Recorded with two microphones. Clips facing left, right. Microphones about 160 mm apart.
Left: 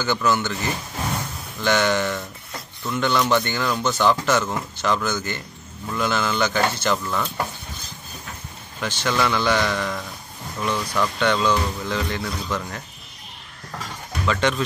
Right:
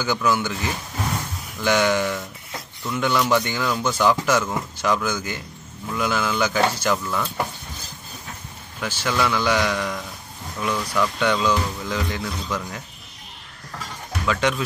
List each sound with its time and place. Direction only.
0.0 s speech: 10° right (ahead or behind)
1.6 s speech: 10° right (ahead or behind)
8.8 s speech: 5° right (ahead or behind)
14.2 s speech: 5° right (ahead or behind)